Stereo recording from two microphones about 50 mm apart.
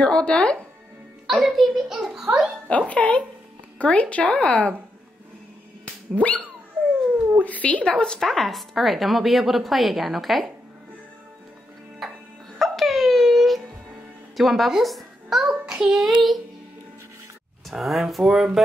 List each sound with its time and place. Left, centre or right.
0.0 s speech: left
1.2 s a woman's voice: centre
2.9 s speech: left
6.1 s speech: left
7.4 s speech: left
7.8 s a woman's voice: centre
8.3 s a woman's voice: centre
12.0 s music: centre
12.5 s dog: centre
14.3 s a child's voice: centre
16.0 s a woman's voice: centre
17.6 s a woman's voice: centre